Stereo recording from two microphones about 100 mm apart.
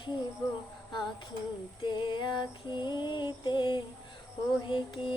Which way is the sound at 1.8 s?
50° left (ahead or behind).